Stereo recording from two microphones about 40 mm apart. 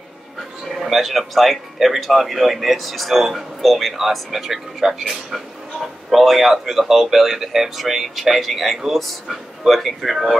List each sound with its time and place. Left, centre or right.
0.7 s speech: centre